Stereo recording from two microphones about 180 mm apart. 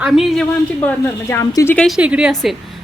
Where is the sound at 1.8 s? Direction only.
Centre (ahead or behind).